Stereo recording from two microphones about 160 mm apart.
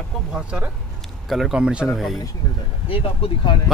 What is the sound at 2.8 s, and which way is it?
Speech, 35° left (ahead or behind).